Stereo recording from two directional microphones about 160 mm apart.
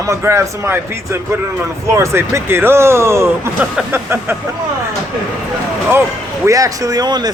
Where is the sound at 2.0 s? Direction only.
15° right (ahead or behind).